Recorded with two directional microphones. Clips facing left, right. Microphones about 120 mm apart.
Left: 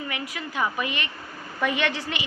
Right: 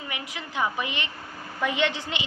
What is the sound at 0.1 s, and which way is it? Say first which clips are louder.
A woman's voice: left 2 dB; 20° right (ahead or behind).